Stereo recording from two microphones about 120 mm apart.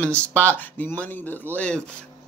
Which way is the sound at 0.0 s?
10° left (ahead or behind).